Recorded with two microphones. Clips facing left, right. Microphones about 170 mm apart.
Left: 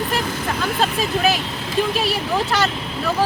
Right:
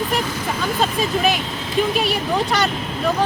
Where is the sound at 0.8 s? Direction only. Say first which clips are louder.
Right 1 dB; centre (ahead or behind).